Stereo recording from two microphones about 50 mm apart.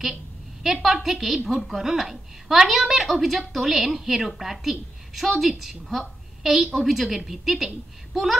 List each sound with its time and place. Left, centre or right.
0.9 s a woman's voice: centre